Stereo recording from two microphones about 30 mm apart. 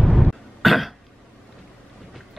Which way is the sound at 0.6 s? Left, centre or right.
Centre.